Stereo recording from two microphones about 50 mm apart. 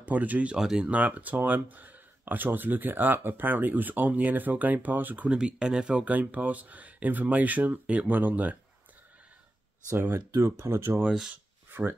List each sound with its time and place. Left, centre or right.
0.0 s speech: right
0.6 s speech: centre
0.8 s speech: right
5.3 s speech: centre
6.0 s speech: right
8.1 s speech: right
10.0 s speech: right
10.6 s speech: right
11.1 s speech: centre